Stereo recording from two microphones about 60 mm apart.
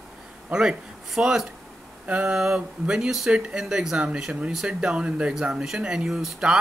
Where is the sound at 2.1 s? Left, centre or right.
Right; by 6.3 s centre.